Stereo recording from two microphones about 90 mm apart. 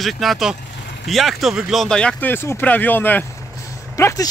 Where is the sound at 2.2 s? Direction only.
25° left (ahead or behind).